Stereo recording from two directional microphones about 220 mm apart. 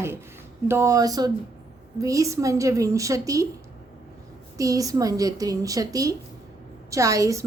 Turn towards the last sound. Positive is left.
turn(degrees=-15)  # may be behind; listen again after turning